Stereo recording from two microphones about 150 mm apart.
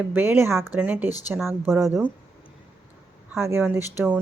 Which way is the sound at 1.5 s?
15° right (ahead or behind).